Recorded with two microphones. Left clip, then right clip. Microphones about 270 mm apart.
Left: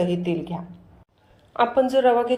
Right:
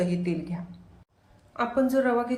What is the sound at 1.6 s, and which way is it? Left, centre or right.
Speech, left.